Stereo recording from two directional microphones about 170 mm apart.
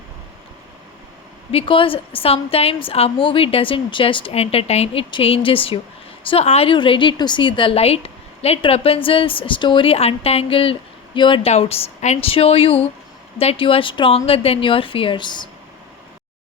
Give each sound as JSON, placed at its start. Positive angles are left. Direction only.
{"t": 1.5, "sound": "a woman's voice", "side_deg": 35}